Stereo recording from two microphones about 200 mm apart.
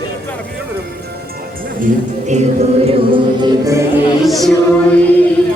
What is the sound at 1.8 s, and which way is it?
Speech, 40° right (ahead or behind).